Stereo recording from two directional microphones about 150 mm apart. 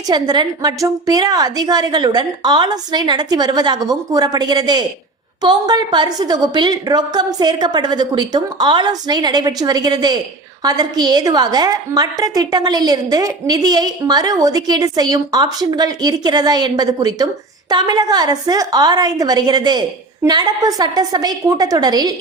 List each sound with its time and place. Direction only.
0.1 s a woman's voice: 30° right (ahead or behind)